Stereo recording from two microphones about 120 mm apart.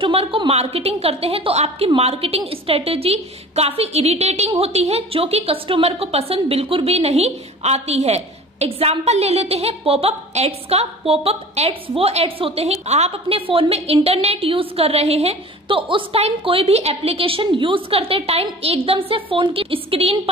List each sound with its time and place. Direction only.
0.0 s a woman's voice: 50° right (ahead or behind)